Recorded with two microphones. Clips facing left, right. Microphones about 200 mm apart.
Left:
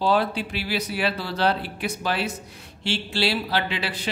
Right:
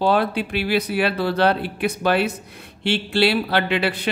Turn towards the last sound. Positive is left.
turn(degrees=-60)  # may be behind; listen again after turning